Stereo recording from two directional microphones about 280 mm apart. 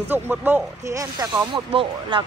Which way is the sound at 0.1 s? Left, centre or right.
Centre.